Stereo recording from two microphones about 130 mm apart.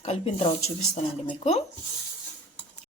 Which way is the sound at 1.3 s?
60° left (ahead or behind).